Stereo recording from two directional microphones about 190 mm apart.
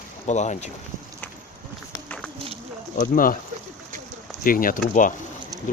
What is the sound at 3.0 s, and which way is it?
Speech, 50° left (ahead or behind).